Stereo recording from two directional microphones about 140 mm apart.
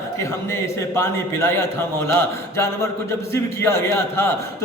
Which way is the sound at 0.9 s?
15° left (ahead or behind).